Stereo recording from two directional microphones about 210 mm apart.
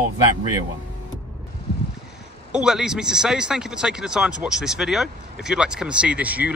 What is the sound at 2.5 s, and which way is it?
Speech, 5° right (ahead or behind).